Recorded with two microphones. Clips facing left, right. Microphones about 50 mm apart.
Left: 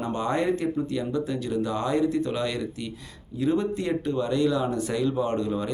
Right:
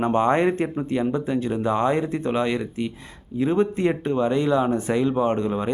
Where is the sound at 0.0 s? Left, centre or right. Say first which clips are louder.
Right 7 dB; right.